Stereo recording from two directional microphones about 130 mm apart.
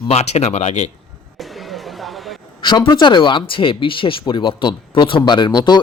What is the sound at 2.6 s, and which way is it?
Speech, 40° left (ahead or behind).